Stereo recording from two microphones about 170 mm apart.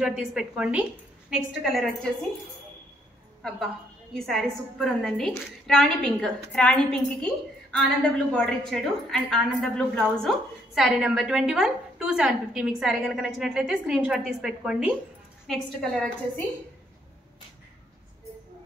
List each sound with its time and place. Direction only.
0.0 s a woman's voice: 5° right (ahead or behind)
4.1 s a woman's voice: centre (ahead or behind)